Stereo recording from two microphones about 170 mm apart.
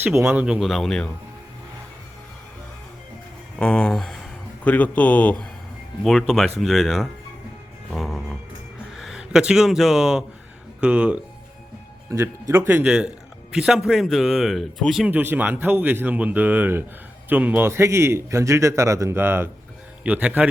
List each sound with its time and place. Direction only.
0.0 s speech: 5° right (ahead or behind)
3.6 s a man's voice: 5° left (ahead or behind)
7.9 s music: centre (ahead or behind)
8.9 s a man's voice: centre (ahead or behind)